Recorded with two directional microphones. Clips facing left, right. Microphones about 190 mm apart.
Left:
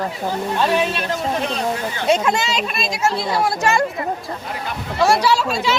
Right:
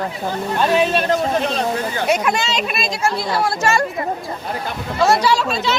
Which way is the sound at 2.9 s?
20° left (ahead or behind).